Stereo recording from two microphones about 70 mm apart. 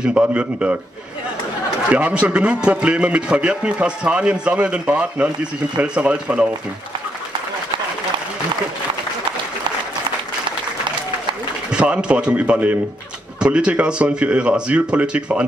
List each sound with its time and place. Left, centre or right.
0.0 s a man's voice: centre
1.9 s a man's voice: centre
11.7 s a man's voice: centre